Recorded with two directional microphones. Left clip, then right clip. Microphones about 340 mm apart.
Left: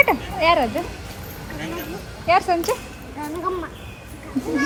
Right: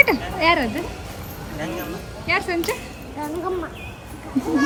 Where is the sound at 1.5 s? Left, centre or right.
Centre.